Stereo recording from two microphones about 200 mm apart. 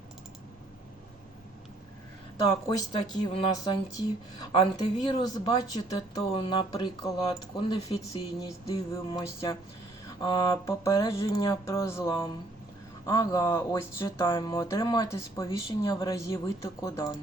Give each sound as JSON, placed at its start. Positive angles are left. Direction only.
{"t": 2.6, "sound": "speech", "side_deg": 25}
{"t": 14.3, "sound": "speech", "side_deg": 25}